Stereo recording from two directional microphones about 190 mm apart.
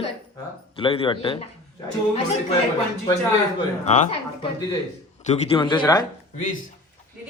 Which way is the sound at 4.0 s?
30° left (ahead or behind).